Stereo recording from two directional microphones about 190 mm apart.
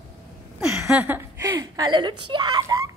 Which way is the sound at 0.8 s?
10° right (ahead or behind).